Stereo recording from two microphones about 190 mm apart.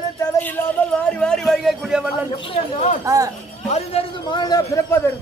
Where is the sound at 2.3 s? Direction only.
30° left (ahead or behind).